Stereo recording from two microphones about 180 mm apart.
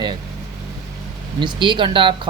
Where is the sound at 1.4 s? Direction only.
25° right (ahead or behind).